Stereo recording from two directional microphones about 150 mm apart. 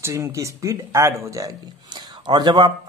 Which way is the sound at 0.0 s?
20° right (ahead or behind).